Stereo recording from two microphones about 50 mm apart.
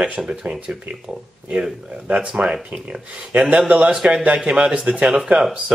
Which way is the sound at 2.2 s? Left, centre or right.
Centre.